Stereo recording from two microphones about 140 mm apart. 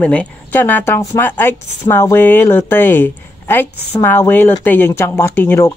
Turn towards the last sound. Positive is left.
turn(degrees=15)  # may be behind; listen again after turning